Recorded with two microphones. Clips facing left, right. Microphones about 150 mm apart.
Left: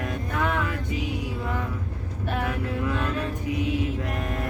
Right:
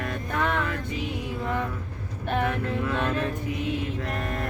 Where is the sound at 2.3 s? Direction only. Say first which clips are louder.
Right 3 dB; 5° left (ahead or behind).